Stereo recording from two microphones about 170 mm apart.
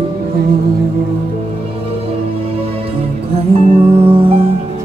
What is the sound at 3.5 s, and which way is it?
Music, 35° right (ahead or behind).